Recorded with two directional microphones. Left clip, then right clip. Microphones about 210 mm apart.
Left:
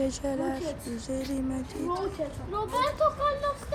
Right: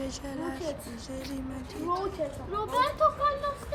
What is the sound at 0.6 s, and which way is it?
Speech, 35° right (ahead or behind).